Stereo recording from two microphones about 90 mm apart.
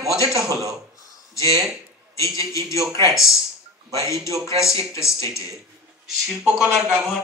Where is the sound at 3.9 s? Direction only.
35° left (ahead or behind).